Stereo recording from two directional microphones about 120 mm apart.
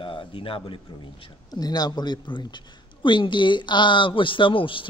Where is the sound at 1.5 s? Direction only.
35° left (ahead or behind).